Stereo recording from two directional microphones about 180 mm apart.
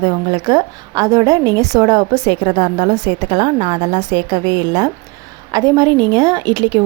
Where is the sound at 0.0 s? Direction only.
25° right (ahead or behind).